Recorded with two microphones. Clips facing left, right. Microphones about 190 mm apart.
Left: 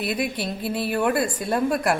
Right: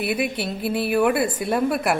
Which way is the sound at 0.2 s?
70° right (ahead or behind).